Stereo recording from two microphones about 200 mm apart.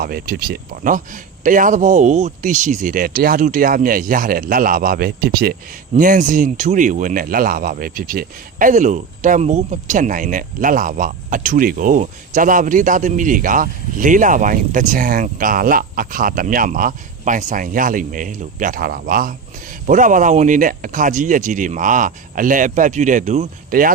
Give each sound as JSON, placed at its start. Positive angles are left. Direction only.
{"t": 0.0, "sound": "speech", "side_deg": -50}